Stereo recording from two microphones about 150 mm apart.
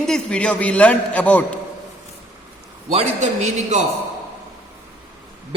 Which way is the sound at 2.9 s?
50° right (ahead or behind).